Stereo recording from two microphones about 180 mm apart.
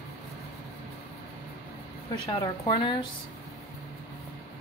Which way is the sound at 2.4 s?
25° left (ahead or behind).